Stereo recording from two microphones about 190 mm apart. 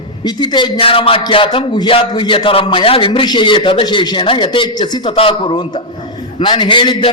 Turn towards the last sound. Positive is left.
turn(degrees=25)  # may be behind; listen again after turning